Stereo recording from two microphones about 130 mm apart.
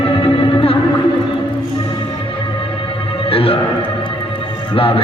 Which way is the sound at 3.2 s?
45° left (ahead or behind).